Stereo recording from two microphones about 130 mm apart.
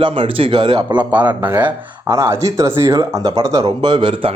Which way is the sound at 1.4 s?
15° right (ahead or behind).